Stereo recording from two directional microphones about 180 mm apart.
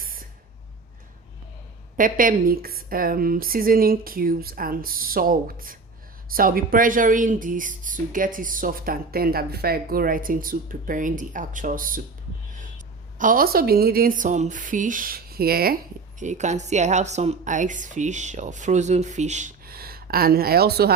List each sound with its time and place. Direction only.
0.0 s a sound: 50° right (ahead or behind)
2.0 s a woman's voice: 50° right (ahead or behind)
16.2 s a woman's voice: 40° right (ahead or behind)
19.6 s speech: 55° right (ahead or behind)